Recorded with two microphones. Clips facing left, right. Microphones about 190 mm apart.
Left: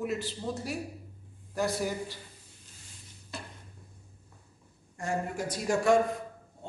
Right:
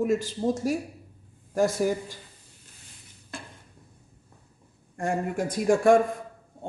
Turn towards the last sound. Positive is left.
turn(degrees=-50)  # may be behind; listen again after turning